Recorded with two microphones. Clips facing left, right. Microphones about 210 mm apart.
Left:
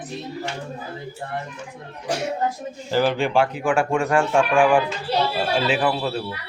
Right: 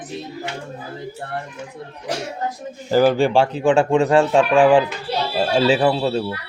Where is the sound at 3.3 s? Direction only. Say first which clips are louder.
Right 4 dB; 25° right (ahead or behind).